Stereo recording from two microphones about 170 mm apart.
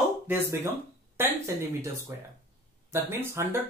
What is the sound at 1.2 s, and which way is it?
Speech, 15° right (ahead or behind).